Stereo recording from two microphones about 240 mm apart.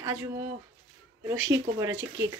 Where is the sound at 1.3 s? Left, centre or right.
Right.